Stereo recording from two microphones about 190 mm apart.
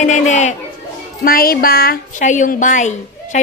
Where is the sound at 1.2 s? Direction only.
50° left (ahead or behind).